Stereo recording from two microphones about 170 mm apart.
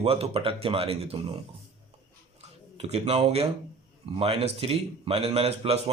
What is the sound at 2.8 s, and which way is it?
Speech, 35° right (ahead or behind).